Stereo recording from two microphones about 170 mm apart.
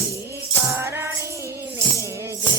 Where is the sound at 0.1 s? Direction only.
15° right (ahead or behind).